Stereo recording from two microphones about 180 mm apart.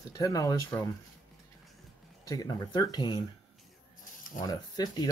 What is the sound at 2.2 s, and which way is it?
Speech, 20° left (ahead or behind).